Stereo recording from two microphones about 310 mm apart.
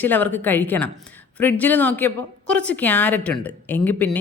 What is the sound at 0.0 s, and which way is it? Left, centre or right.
A woman's voice, centre.